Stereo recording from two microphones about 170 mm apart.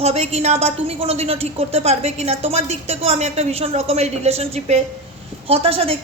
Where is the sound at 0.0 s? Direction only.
40° right (ahead or behind).